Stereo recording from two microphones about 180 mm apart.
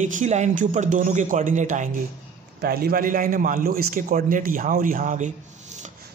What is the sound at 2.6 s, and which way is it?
Speech, 55° right (ahead or behind).